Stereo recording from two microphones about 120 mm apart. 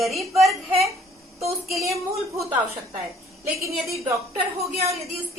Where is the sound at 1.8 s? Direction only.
25° right (ahead or behind).